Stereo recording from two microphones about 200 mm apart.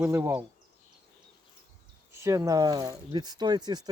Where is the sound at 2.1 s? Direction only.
15° right (ahead or behind).